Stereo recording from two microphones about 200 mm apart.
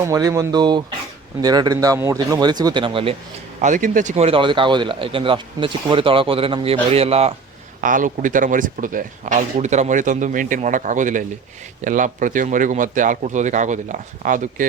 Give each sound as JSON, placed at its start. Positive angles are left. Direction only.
{"t": 0.0, "sound": "speech", "side_deg": -15}
{"t": 3.6, "sound": "speech", "side_deg": -40}
{"t": 7.8, "sound": "speech", "side_deg": -40}